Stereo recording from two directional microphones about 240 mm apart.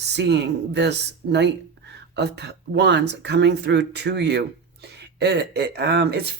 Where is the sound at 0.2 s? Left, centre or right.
Right.